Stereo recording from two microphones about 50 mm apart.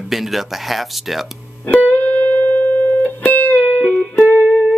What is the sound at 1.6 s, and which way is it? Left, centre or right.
Music, left.